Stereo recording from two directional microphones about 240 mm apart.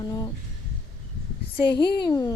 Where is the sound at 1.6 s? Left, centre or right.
Centre.